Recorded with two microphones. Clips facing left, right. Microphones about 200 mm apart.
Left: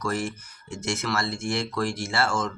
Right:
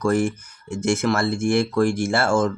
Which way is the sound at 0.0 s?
50° right (ahead or behind).